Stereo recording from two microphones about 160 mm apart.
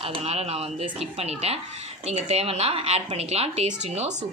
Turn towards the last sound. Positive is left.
turn(degrees=-45)  # may be behind; listen again after turning